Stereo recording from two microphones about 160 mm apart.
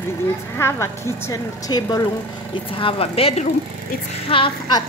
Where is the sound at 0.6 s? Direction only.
15° left (ahead or behind).